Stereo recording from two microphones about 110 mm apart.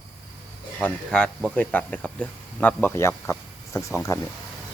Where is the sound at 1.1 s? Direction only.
5° left (ahead or behind); by 4.2 s 25° left (ahead or behind).